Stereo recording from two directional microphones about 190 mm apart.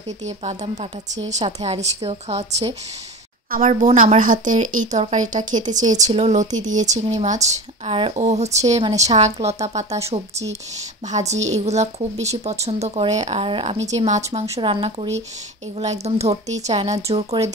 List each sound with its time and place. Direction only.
0.2 s speech: 35° right (ahead or behind)
11.1 s speech: 35° right (ahead or behind)